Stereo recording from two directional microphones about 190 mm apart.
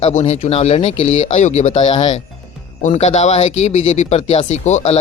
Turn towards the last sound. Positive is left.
turn(degrees=35)  # may be behind; listen again after turning